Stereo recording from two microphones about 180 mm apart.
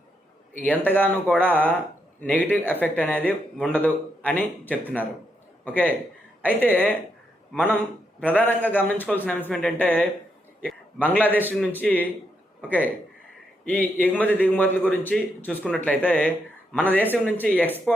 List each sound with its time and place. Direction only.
0.6 s a man's voice: 10° left (ahead or behind)
8.2 s a man's voice: 10° left (ahead or behind)